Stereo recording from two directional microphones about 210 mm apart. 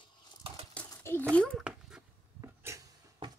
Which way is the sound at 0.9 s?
10° left (ahead or behind).